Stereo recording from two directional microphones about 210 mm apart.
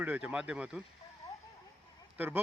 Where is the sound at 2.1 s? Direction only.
10° right (ahead or behind).